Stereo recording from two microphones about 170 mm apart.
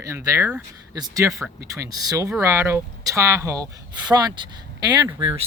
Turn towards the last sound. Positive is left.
turn(degrees=-25)  # may be behind; listen again after turning